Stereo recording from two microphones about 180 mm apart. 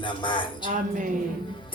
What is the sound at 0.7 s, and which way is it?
Speech, 45° right (ahead or behind).